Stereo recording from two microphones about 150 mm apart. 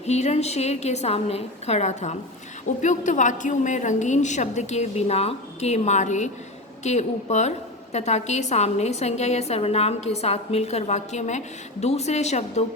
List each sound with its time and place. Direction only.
0.0 s a woman's voice: 50° left (ahead or behind)